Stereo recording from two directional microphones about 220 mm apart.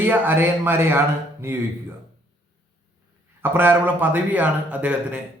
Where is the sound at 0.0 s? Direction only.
10° right (ahead or behind).